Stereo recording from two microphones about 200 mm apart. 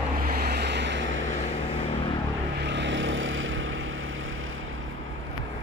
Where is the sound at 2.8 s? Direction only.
70° right (ahead or behind).